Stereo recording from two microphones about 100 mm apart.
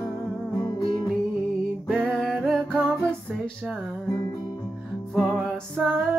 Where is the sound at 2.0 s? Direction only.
5° left (ahead or behind).